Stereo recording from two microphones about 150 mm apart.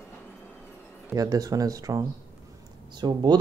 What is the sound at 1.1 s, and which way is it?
Speech, 25° right (ahead or behind).